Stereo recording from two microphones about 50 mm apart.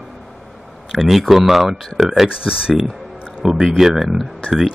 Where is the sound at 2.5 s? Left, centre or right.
Centre.